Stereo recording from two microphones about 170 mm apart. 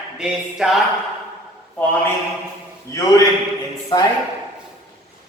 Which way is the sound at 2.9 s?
15° left (ahead or behind).